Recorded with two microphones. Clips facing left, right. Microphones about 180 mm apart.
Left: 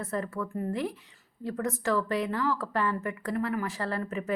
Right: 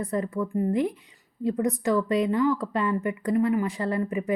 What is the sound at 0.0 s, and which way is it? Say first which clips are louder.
Speech: right 5 dB; 15° right (ahead or behind).